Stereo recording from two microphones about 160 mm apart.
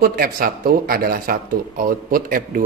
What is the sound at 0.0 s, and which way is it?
Speech, 70° right (ahead or behind).